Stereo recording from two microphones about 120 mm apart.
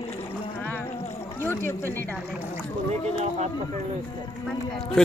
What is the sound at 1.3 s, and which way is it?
Speech, 20° left (ahead or behind).